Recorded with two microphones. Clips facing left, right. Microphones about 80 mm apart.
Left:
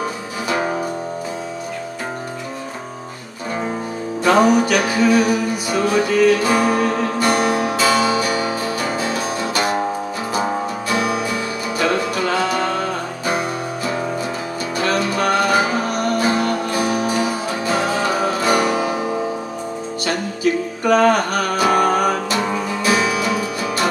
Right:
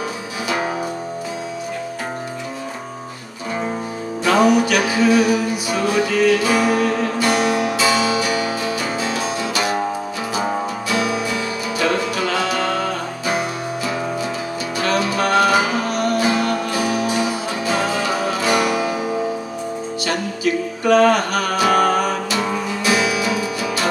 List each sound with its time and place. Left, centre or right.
4.2 s music: left
10.8 s music: left
14.8 s music: left
20.1 s music: left